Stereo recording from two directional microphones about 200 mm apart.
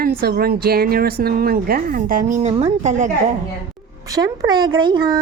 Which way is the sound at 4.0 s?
15° right (ahead or behind).